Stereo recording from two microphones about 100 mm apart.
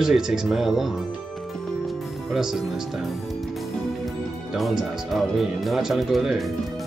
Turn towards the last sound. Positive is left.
turn(degrees=0)  # may be behind; listen again after turning